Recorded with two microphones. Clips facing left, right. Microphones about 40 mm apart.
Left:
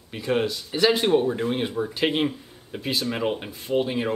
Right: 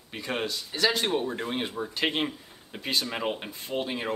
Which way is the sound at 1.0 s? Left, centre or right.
Centre.